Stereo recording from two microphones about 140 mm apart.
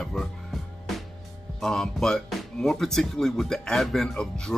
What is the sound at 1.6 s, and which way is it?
Speech, 5° left (ahead or behind).